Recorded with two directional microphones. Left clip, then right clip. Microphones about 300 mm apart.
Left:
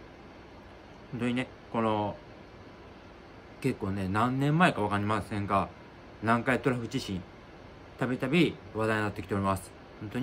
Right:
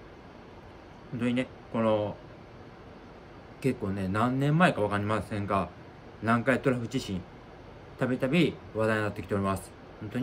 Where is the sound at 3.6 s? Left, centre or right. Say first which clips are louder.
Right 2 dB; centre.